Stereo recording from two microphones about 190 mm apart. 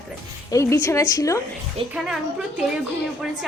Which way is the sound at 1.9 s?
5° right (ahead or behind).